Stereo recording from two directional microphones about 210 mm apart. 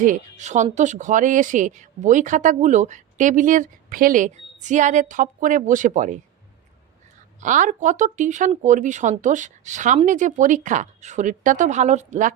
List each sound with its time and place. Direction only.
0.0 s speech: 35° right (ahead or behind)
7.4 s speech: 35° right (ahead or behind)